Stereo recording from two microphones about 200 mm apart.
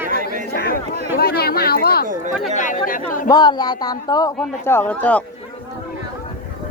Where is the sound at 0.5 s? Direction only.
50° left (ahead or behind).